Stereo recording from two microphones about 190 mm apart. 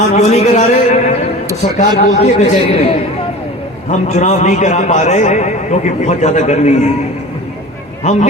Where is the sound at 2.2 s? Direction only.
35° left (ahead or behind).